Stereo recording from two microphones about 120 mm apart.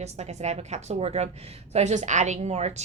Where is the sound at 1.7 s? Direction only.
80° right.